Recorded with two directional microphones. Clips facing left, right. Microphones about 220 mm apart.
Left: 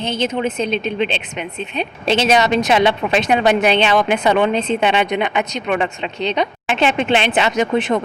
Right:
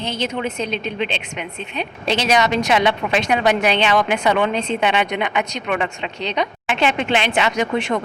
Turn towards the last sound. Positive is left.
turn(degrees=25)  # may be behind; listen again after turning